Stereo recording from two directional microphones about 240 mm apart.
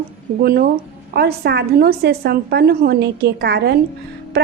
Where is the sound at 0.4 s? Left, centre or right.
Right.